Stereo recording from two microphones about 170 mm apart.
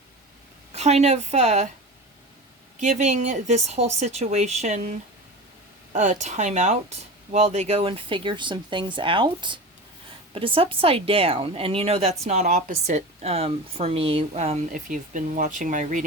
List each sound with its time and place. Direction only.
0.7 s speech: 40° right (ahead or behind)
2.7 s speech: 45° right (ahead or behind)